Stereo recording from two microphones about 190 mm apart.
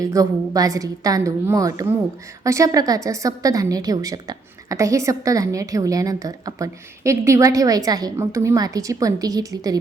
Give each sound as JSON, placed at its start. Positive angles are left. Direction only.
{"t": 0.0, "sound": "a woman's voice", "side_deg": -20}